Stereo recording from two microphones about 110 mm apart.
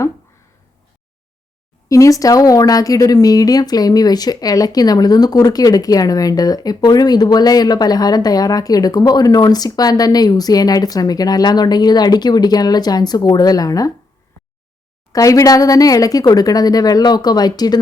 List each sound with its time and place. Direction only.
1.9 s speech: 30° left (ahead or behind)
15.1 s speech: 30° left (ahead or behind)